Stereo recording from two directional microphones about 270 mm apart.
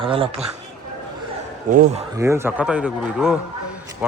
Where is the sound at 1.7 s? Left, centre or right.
Right.